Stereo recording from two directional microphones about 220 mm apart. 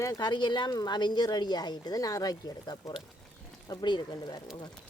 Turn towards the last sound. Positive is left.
turn(degrees=20)  # may be behind; listen again after turning